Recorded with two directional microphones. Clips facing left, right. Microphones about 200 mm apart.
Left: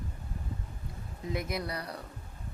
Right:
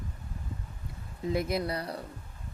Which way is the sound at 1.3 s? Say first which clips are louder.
Right 5 dB; 30° right (ahead or behind).